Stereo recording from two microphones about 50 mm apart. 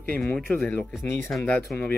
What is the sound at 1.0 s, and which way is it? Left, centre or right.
Speech, left.